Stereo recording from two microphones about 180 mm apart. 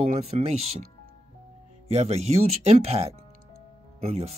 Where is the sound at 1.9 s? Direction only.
35° right (ahead or behind).